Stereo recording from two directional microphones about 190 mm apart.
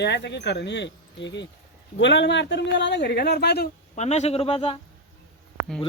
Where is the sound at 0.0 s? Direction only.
65° left (ahead or behind).